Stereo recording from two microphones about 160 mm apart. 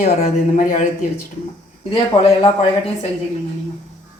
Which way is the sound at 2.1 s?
30° left (ahead or behind).